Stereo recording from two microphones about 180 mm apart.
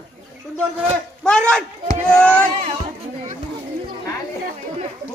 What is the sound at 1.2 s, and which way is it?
Speech, 5° left (ahead or behind).